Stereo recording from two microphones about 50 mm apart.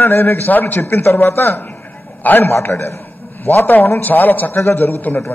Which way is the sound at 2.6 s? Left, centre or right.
Left.